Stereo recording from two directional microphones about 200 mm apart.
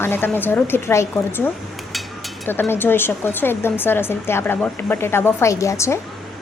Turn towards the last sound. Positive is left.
turn(degrees=15)  # may be behind; listen again after turning